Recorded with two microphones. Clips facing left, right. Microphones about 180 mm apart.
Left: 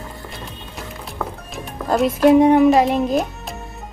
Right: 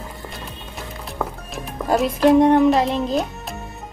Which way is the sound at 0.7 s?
Centre (ahead or behind).